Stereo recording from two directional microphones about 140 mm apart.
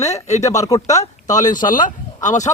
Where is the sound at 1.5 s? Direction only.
70° left (ahead or behind).